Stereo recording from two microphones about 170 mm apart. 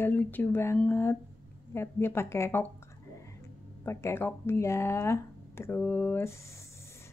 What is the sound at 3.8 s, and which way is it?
Speech, 15° left (ahead or behind).